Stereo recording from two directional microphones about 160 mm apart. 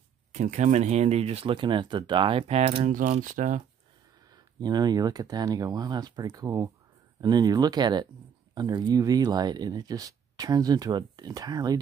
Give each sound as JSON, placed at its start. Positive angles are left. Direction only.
{"t": 0.3, "sound": "speech", "side_deg": -45}
{"t": 2.9, "sound": "speech", "side_deg": -55}
{"t": 4.6, "sound": "speech", "side_deg": -25}